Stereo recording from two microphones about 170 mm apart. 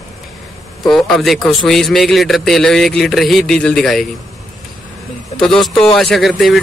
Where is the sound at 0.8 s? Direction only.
5° left (ahead or behind).